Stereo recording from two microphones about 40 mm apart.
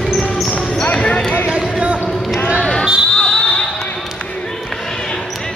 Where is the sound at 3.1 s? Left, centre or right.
Centre.